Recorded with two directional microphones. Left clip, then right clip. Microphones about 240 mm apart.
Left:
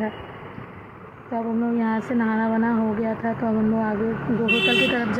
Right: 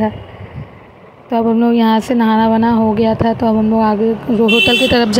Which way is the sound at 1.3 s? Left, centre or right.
Right.